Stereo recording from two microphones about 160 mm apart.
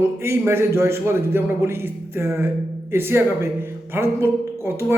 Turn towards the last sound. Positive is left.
turn(degrees=-15)  # may be behind; listen again after turning